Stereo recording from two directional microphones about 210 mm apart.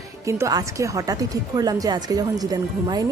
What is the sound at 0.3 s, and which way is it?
A woman's voice, 15° right (ahead or behind).